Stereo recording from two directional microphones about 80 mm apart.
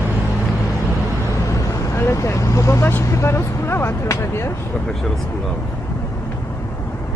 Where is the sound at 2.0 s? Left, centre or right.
Left.